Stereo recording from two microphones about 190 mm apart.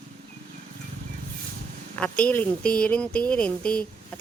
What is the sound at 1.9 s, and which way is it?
Speech, 5° left (ahead or behind).